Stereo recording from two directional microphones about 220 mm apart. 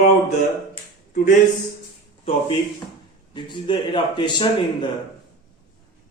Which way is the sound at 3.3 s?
20° left (ahead or behind).